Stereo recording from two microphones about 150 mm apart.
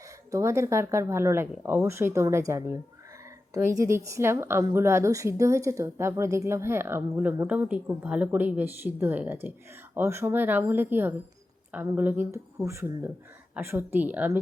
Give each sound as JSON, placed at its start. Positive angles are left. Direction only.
{"t": 0.3, "sound": "a woman's voice", "side_deg": -20}